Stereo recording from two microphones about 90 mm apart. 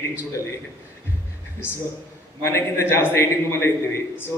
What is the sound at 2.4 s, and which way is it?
A man's voice, 30° left (ahead or behind).